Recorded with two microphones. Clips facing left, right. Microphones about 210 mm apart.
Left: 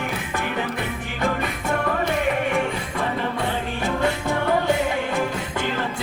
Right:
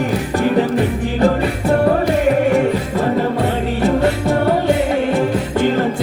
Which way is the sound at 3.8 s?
35° right (ahead or behind).